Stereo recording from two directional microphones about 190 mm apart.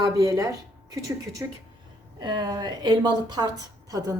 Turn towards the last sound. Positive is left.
turn(degrees=-20)  # may be behind; listen again after turning